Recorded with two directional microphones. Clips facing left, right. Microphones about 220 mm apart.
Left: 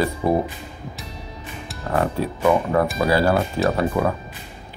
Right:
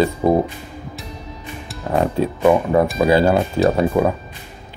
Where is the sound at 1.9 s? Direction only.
20° right (ahead or behind).